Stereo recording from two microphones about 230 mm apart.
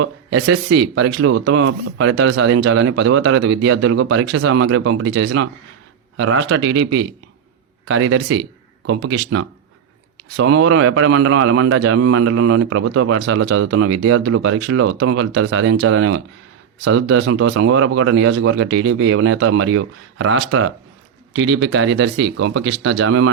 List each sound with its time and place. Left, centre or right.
0.0 s a man's voice: right